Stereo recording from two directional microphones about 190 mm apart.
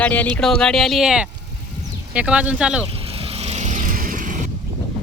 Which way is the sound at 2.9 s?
30° right (ahead or behind).